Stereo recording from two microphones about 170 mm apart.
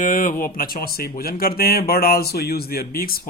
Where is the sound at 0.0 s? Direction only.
55° left (ahead or behind).